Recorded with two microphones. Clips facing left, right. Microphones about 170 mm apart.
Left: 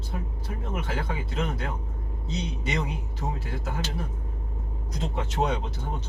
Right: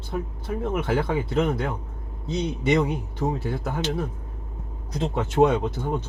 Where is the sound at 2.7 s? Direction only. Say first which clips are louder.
Right 11 dB; 55° right (ahead or behind).